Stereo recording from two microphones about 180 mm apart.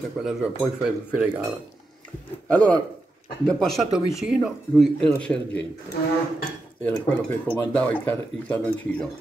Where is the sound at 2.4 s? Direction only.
5° left (ahead or behind).